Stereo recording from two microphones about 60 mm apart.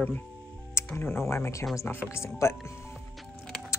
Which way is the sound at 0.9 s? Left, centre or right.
Left.